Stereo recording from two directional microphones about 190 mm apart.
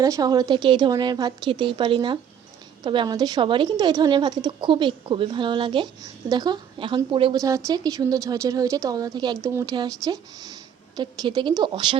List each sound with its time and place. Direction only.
0.0 s a woman's voice: 20° right (ahead or behind)